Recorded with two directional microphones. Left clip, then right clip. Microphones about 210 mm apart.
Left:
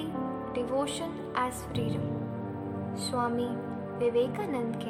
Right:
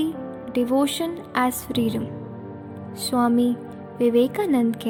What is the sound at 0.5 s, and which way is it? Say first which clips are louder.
A woman's voice: right 10 dB; 35° right (ahead or behind).